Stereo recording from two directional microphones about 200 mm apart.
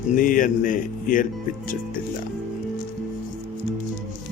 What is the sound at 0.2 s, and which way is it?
Speech, 40° left (ahead or behind).